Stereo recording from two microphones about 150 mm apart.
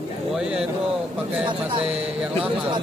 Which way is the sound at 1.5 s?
35° right (ahead or behind).